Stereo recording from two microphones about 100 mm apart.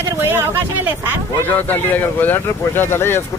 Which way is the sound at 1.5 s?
20° left (ahead or behind).